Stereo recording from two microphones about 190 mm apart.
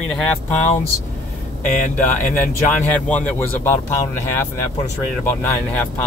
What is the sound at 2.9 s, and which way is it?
Speech, 5° left (ahead or behind).